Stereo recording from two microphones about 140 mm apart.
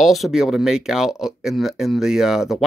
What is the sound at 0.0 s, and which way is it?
Speech, centre (ahead or behind).